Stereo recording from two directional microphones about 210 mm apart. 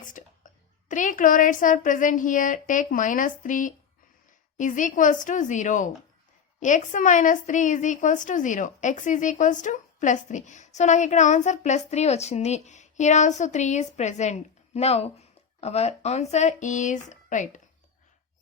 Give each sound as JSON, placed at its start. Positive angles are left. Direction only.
{"t": 0.0, "sound": "a woman's voice", "side_deg": 40}